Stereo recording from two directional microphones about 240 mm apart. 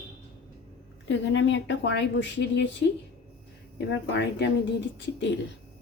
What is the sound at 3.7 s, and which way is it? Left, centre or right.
Speech, left.